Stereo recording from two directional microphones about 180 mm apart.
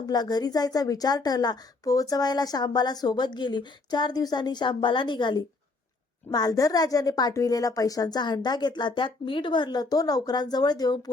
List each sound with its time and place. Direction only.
0.0 s a woman's voice: 20° left (ahead or behind)